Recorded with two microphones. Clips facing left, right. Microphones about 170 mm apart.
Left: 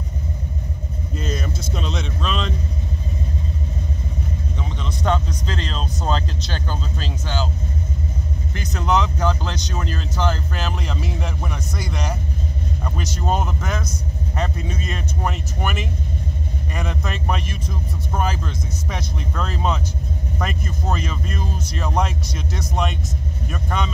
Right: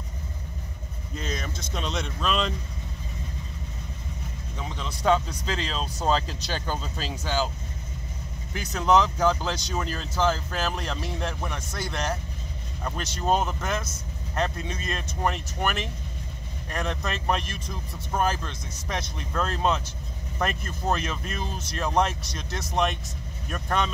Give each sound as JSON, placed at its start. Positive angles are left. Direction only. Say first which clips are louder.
{"t": 1.1, "sound": "a sound", "louder": "left 5 dB", "side_deg": 5}
{"t": 4.6, "sound": "speech", "louder": "left 6 dB", "side_deg": -5}
{"t": 8.5, "sound": "speech", "louder": "even", "side_deg": -5}